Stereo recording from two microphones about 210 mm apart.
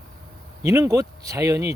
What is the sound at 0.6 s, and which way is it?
Speech, 15° right (ahead or behind).